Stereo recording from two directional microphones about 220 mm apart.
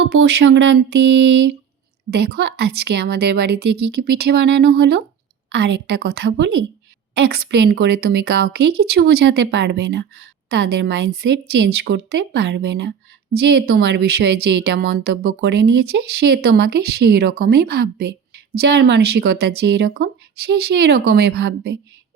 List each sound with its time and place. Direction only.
0.0 s a woman's voice: 55° right (ahead or behind)